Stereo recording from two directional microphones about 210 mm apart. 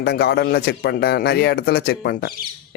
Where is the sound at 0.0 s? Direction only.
50° left (ahead or behind).